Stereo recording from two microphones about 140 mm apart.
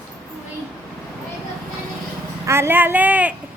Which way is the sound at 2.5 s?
15° right (ahead or behind).